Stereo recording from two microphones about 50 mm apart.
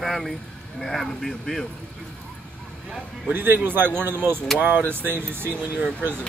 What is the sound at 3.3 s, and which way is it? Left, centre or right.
Speech, right.